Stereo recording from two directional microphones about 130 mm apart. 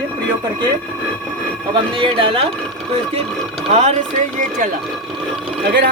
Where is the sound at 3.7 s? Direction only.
60° right (ahead or behind); by 4.7 s 85° right.